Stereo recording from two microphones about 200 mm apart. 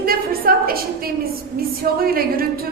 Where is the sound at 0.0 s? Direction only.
50° right (ahead or behind).